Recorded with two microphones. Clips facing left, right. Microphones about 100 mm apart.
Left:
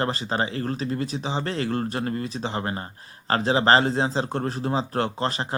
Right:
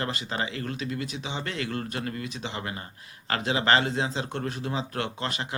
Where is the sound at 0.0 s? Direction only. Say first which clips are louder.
Left 5 dB; 35° left (ahead or behind).